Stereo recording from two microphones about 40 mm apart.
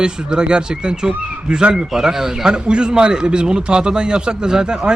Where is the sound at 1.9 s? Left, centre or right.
Centre.